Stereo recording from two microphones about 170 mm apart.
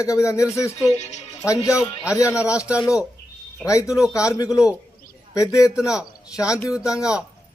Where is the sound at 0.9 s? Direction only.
40° left (ahead or behind).